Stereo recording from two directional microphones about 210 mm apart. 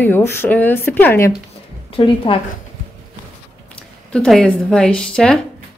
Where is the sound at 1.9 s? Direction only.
25° left (ahead or behind).